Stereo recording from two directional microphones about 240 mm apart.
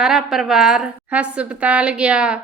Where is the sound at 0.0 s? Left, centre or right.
Centre.